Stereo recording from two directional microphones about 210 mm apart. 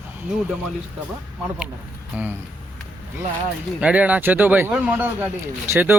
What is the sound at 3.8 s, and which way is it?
Speech, 5° right (ahead or behind).